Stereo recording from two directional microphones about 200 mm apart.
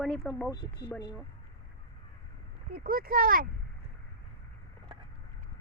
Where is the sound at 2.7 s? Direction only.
45° right (ahead or behind).